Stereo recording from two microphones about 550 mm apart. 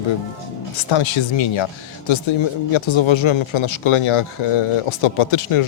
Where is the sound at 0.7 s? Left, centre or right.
Left.